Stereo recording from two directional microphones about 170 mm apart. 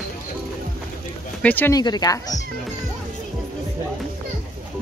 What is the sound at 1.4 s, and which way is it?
Speech, 10° left (ahead or behind).